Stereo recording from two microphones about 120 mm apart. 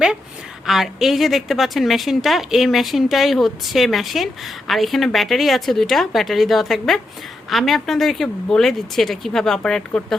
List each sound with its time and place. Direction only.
0.7 s a woman's voice: centre (ahead or behind)